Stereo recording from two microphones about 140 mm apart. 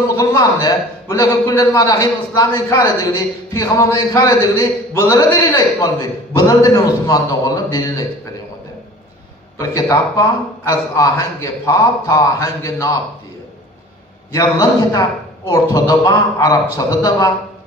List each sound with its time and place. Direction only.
0.1 s a man's voice: 25° left (ahead or behind)
9.6 s a man's voice: 25° left (ahead or behind)
14.3 s a man's voice: 25° left (ahead or behind)